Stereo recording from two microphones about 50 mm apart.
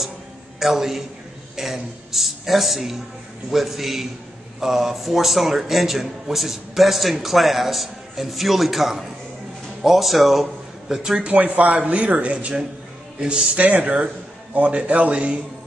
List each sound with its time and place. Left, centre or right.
0.6 s a woman's voice: centre
11.2 s speech: right
13.6 s speech: right